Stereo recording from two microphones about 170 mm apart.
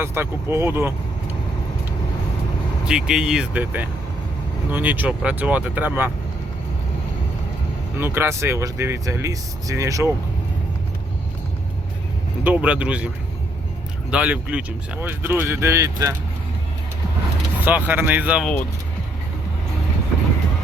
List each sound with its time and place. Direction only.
0.0 s speech: 15° right (ahead or behind)
2.8 s speech: 5° right (ahead or behind)
7.9 s speech: 15° right (ahead or behind)
12.5 s speech: 5° right (ahead or behind)
14.1 s speech: 10° right (ahead or behind)
17.7 s speech: 10° right (ahead or behind)